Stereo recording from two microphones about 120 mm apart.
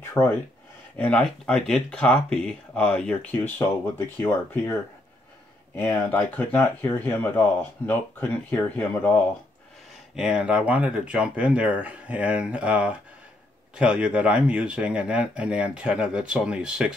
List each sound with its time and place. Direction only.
0.1 s speech: 15° left (ahead or behind)
6.0 s speech: 15° left (ahead or behind)
10.1 s speech: 5° right (ahead or behind)